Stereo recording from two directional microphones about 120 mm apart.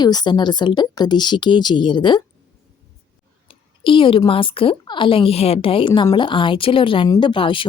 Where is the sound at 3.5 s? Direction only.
45° left (ahead or behind).